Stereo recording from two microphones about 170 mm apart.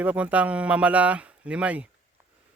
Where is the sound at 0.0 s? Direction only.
10° right (ahead or behind).